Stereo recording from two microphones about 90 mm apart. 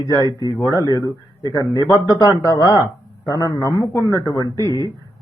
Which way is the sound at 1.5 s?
40° left (ahead or behind).